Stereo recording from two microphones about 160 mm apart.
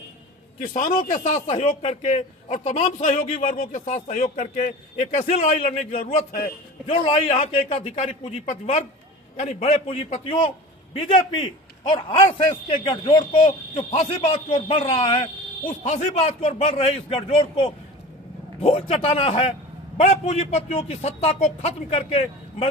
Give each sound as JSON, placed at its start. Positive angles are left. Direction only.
{"t": 0.6, "sound": "a man's voice", "side_deg": 65}
{"t": 1.1, "sound": "speech", "side_deg": 45}
{"t": 2.8, "sound": "speech", "side_deg": 55}
{"t": 3.2, "sound": "speech", "side_deg": 40}
{"t": 3.4, "sound": "speech", "side_deg": 50}
{"t": 5.5, "sound": "speech", "side_deg": 35}